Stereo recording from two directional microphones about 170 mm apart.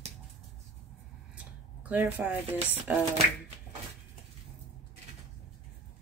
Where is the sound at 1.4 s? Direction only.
10° right (ahead or behind).